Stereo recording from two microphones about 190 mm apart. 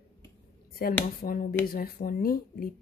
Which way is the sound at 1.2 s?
40° left (ahead or behind).